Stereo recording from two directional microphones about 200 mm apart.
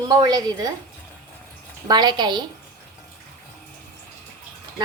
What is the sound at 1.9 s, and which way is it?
Speech, 20° right (ahead or behind).